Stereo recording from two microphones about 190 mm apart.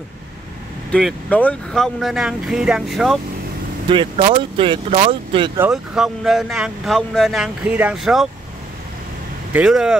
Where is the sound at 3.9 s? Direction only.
25° right (ahead or behind).